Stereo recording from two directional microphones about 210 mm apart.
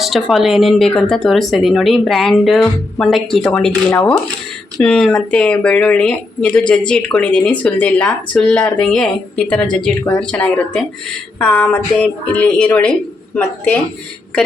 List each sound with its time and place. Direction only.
0.0 s a woman's voice: centre (ahead or behind)